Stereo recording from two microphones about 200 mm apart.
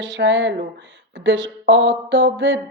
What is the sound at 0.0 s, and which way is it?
Speech, 65° right (ahead or behind).